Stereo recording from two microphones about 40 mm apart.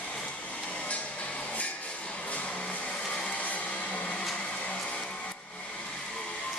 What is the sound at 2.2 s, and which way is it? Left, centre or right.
Music, left.